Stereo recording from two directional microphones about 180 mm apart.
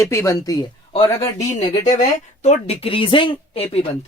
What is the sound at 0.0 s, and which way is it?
Speech, 15° left (ahead or behind).